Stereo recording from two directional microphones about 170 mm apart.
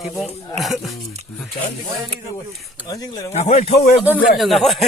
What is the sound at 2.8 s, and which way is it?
Speech, 20° left (ahead or behind).